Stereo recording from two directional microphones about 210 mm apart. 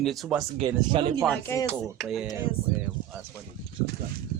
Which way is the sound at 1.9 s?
Centre (ahead or behind).